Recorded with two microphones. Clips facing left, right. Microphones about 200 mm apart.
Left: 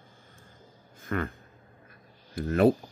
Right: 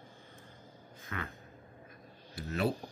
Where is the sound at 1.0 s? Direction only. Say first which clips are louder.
Left 11 dB; 50° left (ahead or behind).